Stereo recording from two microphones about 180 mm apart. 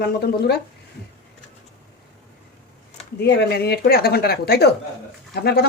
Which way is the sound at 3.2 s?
65° left (ahead or behind).